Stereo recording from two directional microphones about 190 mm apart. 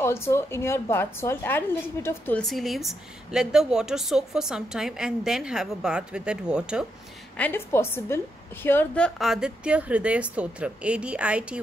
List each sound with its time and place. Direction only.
0.0 s a woman's voice: 15° left (ahead or behind); by 6.9 s 5° right (ahead or behind)
7.3 s a woman's voice: 10° left (ahead or behind); by 11.6 s 5° right (ahead or behind)